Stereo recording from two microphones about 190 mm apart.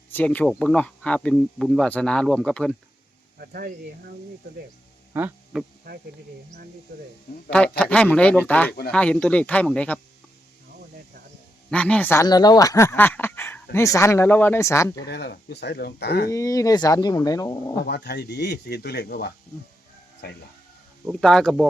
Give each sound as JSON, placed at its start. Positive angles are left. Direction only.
{"t": 0.1, "sound": "speech", "side_deg": 10}
{"t": 3.3, "sound": "speech", "side_deg": -50}
{"t": 5.1, "sound": "speech", "side_deg": -10}
{"t": 7.3, "sound": "speech", "side_deg": 55}
{"t": 7.8, "sound": "speech", "side_deg": 5}
{"t": 11.7, "sound": "speech", "side_deg": 5}
{"t": 15.0, "sound": "speech", "side_deg": 60}
{"t": 16.3, "sound": "speech", "side_deg": 15}
{"t": 17.8, "sound": "speech", "side_deg": 60}
{"t": 21.1, "sound": "speech", "side_deg": 0}